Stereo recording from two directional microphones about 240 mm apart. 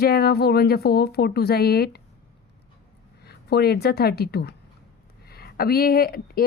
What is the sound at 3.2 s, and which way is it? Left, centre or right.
A woman's voice, left.